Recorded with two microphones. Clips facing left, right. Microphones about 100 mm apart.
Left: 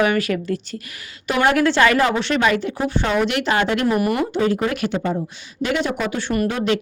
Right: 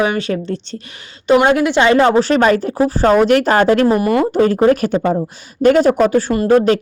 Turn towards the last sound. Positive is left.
turn(degrees=-40)  # may be behind; listen again after turning